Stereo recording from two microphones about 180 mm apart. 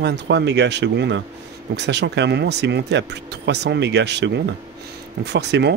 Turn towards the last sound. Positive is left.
turn(degrees=-70)  # may be behind; listen again after turning